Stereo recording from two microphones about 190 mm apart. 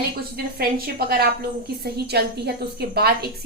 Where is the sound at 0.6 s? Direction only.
55° right (ahead or behind).